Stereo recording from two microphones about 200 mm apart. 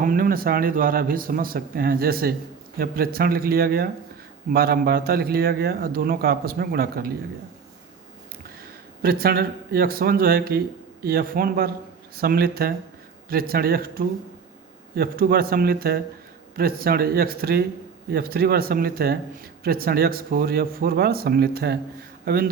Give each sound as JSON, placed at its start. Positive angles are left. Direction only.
{"t": 0.0, "sound": "speech", "side_deg": -45}
{"t": 9.0, "sound": "speech", "side_deg": -50}